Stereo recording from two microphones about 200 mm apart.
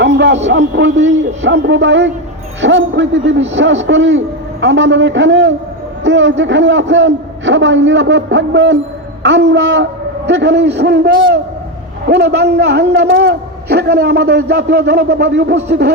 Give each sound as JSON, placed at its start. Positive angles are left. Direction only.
{"t": 0.0, "sound": "a man's voice", "side_deg": -60}